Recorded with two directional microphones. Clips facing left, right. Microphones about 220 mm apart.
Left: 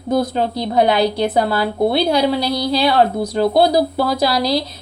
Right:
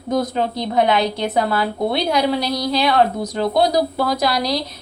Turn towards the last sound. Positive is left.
turn(degrees=30)  # may be behind; listen again after turning